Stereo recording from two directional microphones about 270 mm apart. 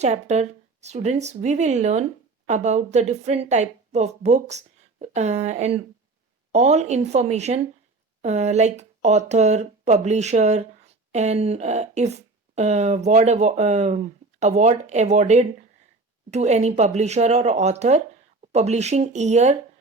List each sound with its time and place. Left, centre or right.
0.0 s speech: right